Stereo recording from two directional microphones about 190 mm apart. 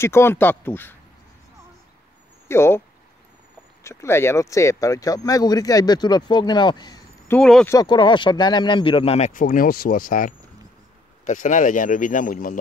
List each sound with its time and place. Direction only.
0.0 s speech: 15° left (ahead or behind)
2.4 s speech: 15° left (ahead or behind)
3.8 s speech: 15° left (ahead or behind)
7.3 s speech: 5° left (ahead or behind)
7.7 s speech: 25° left (ahead or behind); by 12.5 s 45° left (ahead or behind)